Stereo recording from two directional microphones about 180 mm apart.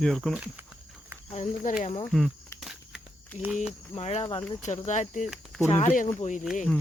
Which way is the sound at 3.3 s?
40° left (ahead or behind).